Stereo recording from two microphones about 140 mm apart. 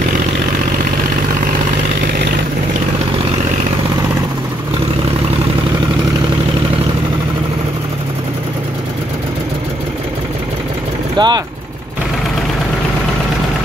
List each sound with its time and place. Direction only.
11.1 s speech: 30° right (ahead or behind)